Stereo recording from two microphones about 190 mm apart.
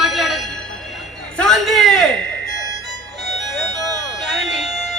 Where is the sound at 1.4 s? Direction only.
Centre (ahead or behind).